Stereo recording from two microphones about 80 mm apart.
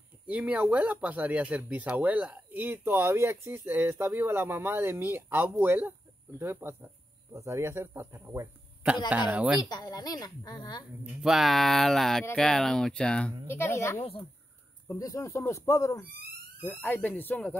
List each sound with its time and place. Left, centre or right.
0.3 s speech: centre; by 8.5 s right
9.3 s speech: centre
9.6 s a woman's voice: left
11.2 s speech: centre
13.5 s speech: left
16.8 s speech: left